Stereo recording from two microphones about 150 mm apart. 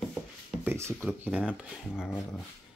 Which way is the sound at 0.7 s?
15° right (ahead or behind).